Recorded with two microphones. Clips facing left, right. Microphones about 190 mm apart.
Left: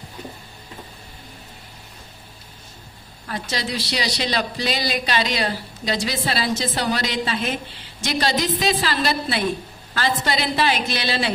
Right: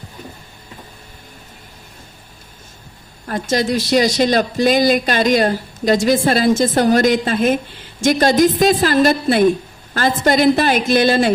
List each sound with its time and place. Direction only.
3.2 s speech: 45° right (ahead or behind)